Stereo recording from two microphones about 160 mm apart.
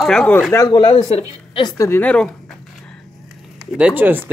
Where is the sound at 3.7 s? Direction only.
10° right (ahead or behind).